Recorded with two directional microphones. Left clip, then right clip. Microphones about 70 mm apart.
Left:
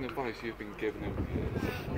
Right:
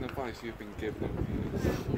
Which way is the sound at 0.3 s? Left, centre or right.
Right.